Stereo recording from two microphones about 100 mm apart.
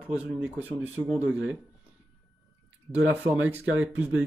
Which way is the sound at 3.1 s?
15° right (ahead or behind).